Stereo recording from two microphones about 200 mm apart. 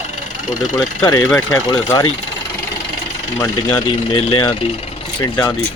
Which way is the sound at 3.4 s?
20° left (ahead or behind).